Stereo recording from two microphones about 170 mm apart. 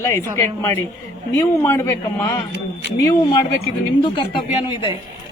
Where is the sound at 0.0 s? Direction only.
15° left (ahead or behind).